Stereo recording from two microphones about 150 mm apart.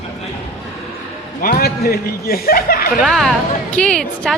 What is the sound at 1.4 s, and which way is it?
Speech, 85° left.